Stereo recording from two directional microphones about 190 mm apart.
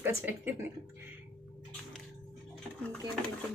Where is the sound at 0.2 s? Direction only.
10° right (ahead or behind).